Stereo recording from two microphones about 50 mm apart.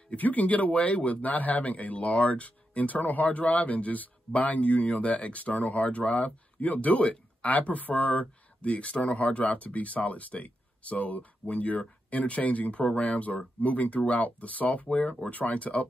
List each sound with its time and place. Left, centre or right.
0.1 s speech: left